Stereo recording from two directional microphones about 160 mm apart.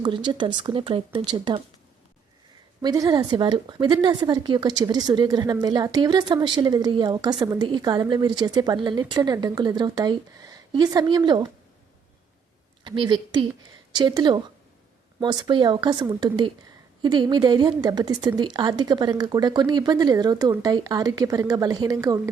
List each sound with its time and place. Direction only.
0.0 s speech: 30° right (ahead or behind)
2.8 s a woman's voice: 25° right (ahead or behind)
12.8 s a woman's voice: 30° right (ahead or behind)